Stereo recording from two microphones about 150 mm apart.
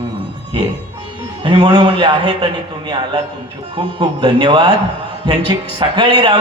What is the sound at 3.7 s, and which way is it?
Speech, 30° right (ahead or behind).